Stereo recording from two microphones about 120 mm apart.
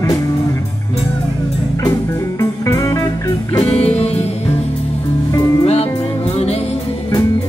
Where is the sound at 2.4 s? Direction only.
25° left (ahead or behind).